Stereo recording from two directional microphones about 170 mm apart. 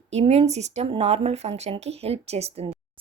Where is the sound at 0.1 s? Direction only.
40° right (ahead or behind).